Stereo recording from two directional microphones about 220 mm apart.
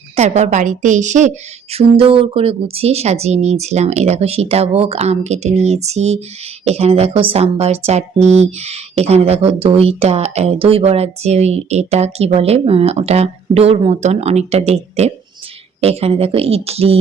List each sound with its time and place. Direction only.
0.2 s a woman's voice: 30° right (ahead or behind)